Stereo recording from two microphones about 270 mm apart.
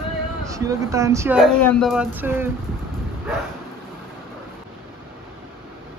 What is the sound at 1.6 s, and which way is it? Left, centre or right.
Speech, centre.